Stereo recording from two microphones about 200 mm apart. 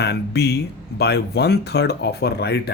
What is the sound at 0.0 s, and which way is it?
Speech, 55° left (ahead or behind).